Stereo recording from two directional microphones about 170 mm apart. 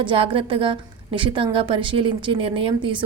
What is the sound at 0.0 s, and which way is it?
Speech, 30° right (ahead or behind).